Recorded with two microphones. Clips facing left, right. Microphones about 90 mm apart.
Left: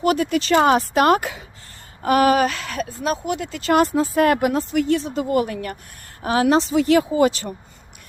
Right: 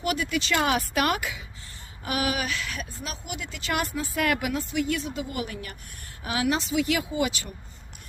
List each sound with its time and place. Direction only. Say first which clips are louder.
0.0 s speech: left 8 dB; 35° left (ahead or behind)
5.5 s speech: left 10 dB; 60° left (ahead or behind)
6.2 s speech: left 9 dB; 40° left (ahead or behind)